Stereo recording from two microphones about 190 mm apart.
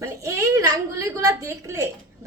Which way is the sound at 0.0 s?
15° right (ahead or behind).